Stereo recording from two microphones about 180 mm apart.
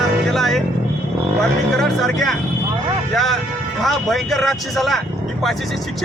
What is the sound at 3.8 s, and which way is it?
Speech, centre (ahead or behind).